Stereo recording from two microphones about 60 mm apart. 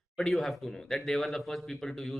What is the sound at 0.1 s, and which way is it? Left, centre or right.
Speech, centre.